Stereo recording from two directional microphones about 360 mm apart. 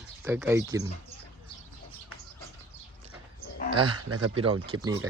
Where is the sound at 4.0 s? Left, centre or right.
Right.